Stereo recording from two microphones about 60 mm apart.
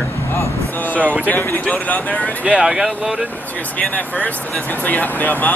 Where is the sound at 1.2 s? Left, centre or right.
Left.